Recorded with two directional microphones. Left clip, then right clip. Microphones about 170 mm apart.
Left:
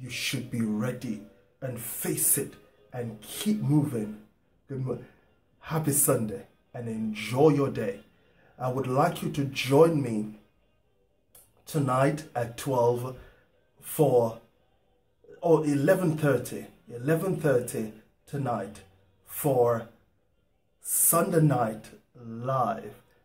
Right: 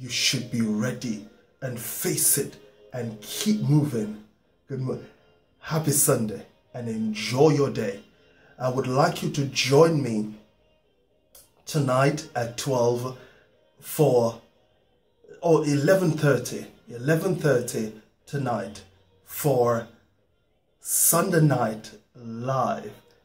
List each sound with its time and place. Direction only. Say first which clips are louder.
0.0 s speech: right 7 dB; 20° left (ahead or behind)
5.6 s speech: right 3 dB; 20° left (ahead or behind)
11.6 s speech: right 3 dB; 20° left (ahead or behind)
15.3 s speech: right 2 dB; 20° left (ahead or behind)
21.1 s speech: right 2 dB; 20° left (ahead or behind)